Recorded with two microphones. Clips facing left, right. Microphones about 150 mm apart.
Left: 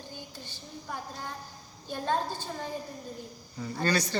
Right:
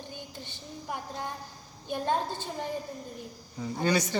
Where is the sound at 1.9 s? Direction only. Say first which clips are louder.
Right 1 dB; 20° right (ahead or behind).